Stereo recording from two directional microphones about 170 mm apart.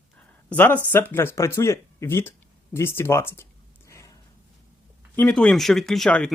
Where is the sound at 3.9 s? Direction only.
15° left (ahead or behind).